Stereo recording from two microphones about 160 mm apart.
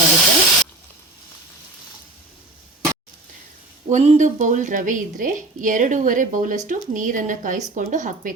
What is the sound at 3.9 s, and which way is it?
A woman's voice, 45° right (ahead or behind).